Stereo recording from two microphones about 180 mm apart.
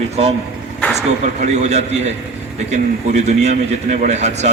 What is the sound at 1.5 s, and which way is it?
A man's voice, 40° right (ahead or behind).